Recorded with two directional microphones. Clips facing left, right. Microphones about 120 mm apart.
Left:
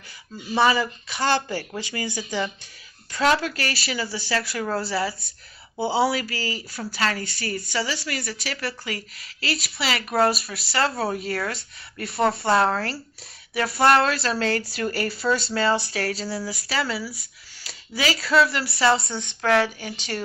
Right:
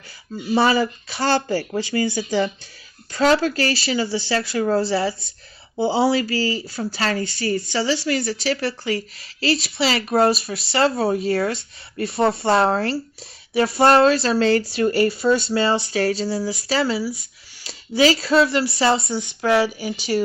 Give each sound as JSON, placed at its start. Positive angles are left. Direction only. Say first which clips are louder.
{"t": 0.6, "sound": "speech", "louder": "even", "side_deg": -35}
{"t": 19.1, "sound": "speech", "louder": "right 3 dB", "side_deg": -5}